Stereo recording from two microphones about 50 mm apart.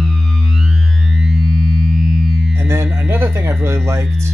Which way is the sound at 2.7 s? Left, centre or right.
Right.